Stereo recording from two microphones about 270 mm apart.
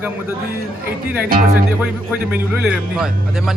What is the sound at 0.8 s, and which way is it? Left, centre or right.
Speech, right.